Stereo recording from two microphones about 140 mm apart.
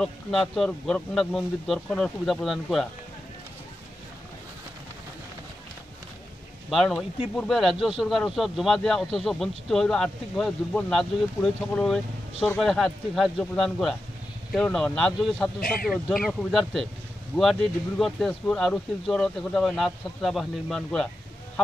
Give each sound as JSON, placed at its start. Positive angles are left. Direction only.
{"t": 0.0, "sound": "speech", "side_deg": 0}
{"t": 6.7, "sound": "speech", "side_deg": 0}
{"t": 15.6, "sound": "speech", "side_deg": 90}
{"t": 16.3, "sound": "speech", "side_deg": 0}